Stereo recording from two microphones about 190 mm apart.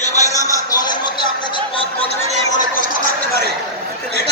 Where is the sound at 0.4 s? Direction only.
25° left (ahead or behind).